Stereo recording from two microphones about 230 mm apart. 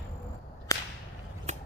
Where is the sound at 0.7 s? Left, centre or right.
Centre.